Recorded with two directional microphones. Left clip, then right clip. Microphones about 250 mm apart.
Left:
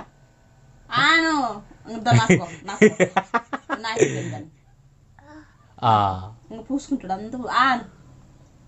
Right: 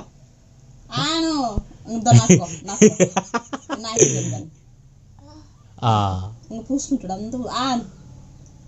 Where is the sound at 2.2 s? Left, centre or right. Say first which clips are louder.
Right 2 dB; left.